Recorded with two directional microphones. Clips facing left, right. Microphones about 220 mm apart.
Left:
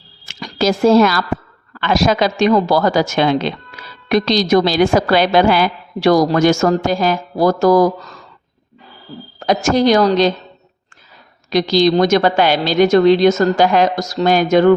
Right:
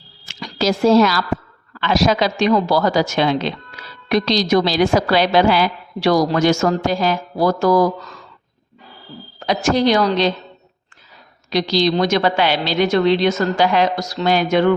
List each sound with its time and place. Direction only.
0.3 s a sound: 50° left (ahead or behind)
1.7 s a woman's voice: 50° left (ahead or behind)
9.4 s a woman's voice: 45° left (ahead or behind)
11.5 s a woman's voice: 50° left (ahead or behind)